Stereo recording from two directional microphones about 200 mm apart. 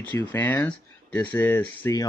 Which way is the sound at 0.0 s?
10° left (ahead or behind).